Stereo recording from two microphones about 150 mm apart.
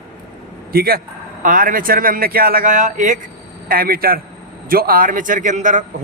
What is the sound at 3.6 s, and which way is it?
A man's voice, 80° right.